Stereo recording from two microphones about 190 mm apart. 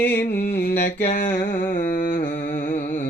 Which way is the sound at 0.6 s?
60° left (ahead or behind).